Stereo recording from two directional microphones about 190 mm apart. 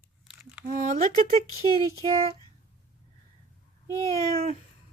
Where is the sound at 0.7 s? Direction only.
40° right (ahead or behind).